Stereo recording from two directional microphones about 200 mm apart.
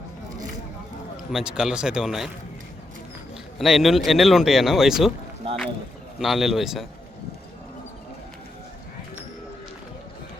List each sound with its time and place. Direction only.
1.1 s speech: centre (ahead or behind)
3.6 s speech: centre (ahead or behind)
5.4 s speech: 25° right (ahead or behind)
6.1 s speech: centre (ahead or behind)